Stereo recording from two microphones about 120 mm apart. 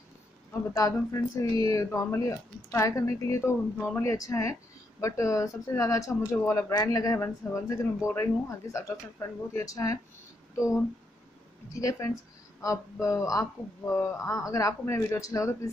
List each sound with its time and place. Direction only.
0.5 s speech: 30° left (ahead or behind)
12.6 s speech: 30° left (ahead or behind)